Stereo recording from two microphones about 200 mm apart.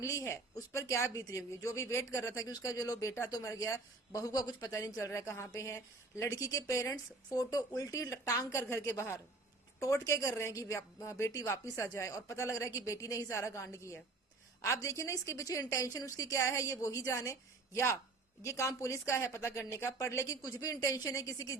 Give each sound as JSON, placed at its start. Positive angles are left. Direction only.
{"t": 0.0, "sound": "speech", "side_deg": 15}